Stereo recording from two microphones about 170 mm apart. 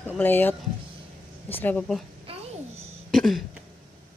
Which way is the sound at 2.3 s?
35° right (ahead or behind).